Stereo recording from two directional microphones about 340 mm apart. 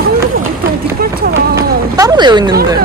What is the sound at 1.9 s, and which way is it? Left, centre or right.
Speech, centre.